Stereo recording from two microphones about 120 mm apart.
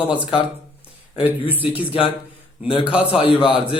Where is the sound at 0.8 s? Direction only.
10° right (ahead or behind).